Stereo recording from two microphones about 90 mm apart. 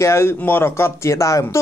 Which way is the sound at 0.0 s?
30° left (ahead or behind).